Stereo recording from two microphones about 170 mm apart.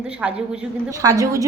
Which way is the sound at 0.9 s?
20° right (ahead or behind).